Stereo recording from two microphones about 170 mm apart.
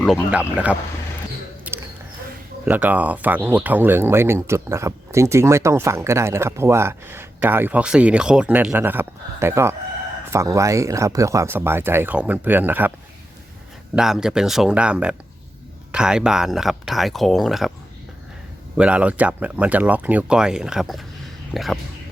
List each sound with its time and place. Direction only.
0.0 s speech: 5° right (ahead or behind)
1.7 s a sound: 10° right (ahead or behind)
2.6 s speech: 10° right (ahead or behind)
13.9 s speech: 5° right (ahead or behind)
18.8 s speech: 5° right (ahead or behind)